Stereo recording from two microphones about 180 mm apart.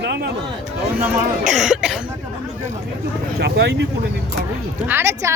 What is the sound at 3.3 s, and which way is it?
Speech, 65° right (ahead or behind).